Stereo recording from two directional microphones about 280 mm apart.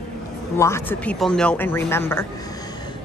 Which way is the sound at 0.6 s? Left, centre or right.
Centre.